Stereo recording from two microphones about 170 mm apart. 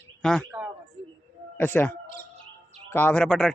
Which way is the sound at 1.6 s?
10° left (ahead or behind).